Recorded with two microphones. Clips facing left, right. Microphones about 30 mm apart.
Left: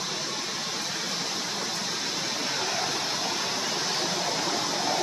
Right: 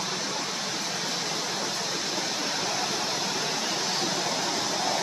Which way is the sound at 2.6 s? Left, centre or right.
Centre.